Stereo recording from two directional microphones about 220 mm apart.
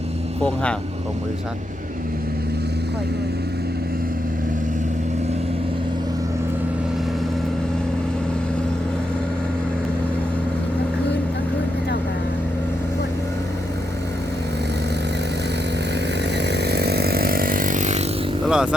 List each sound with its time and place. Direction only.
0.4 s speech: 5° left (ahead or behind)
16.3 s chainsaw: 50° right (ahead or behind)
18.4 s vehicle: 5° right (ahead or behind)